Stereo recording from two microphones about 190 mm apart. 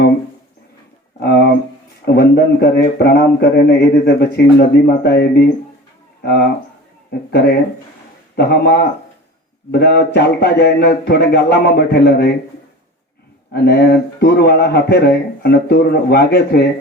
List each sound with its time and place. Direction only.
1.2 s a sound: 55° left (ahead or behind)
2.0 s a man's voice: 60° left (ahead or behind)
7.1 s a man's voice: 60° left (ahead or behind)
13.5 s a man's voice: 60° left (ahead or behind)